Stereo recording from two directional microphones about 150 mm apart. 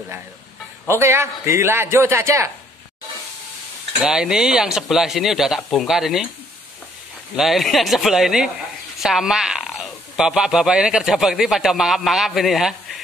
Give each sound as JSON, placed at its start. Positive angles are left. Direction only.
{"t": 0.8, "sound": "a man's voice", "side_deg": -15}
{"t": 4.0, "sound": "speech", "side_deg": -5}
{"t": 7.3, "sound": "speech", "side_deg": 0}